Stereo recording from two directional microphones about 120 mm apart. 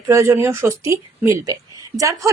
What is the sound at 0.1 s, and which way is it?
Speech, 25° right (ahead or behind).